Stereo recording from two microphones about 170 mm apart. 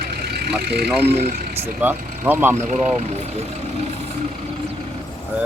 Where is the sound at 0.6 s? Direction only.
65° right (ahead or behind).